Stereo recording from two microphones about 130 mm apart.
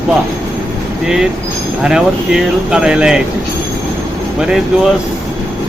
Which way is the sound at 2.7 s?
5° right (ahead or behind).